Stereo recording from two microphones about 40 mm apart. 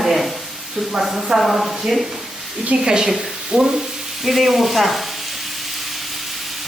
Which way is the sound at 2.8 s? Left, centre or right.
Centre.